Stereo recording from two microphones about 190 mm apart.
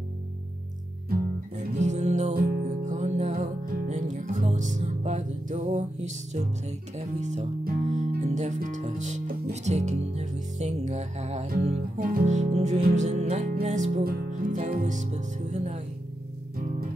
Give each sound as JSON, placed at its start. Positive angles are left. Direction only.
{"t": 1.7, "sound": "music", "side_deg": -40}
{"t": 7.0, "sound": "speech", "side_deg": -35}
{"t": 12.0, "sound": "speech", "side_deg": -50}